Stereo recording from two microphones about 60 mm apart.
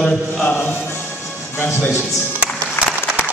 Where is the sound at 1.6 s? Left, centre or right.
Left.